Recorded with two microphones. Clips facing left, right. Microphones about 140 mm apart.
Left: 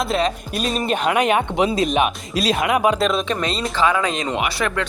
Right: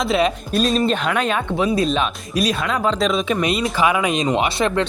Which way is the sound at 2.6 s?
15° left (ahead or behind).